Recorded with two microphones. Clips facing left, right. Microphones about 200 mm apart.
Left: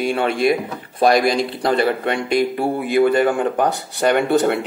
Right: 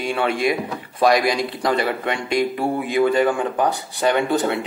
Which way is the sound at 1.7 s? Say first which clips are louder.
Left 4 dB; 55° left (ahead or behind).